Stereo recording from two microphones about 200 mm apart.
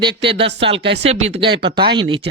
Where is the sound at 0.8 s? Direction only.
65° right (ahead or behind).